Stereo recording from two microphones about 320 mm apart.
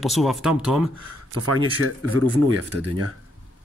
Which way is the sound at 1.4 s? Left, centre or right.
Right.